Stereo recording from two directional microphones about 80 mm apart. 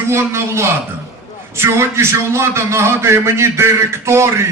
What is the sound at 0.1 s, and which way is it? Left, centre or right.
A man's voice, right.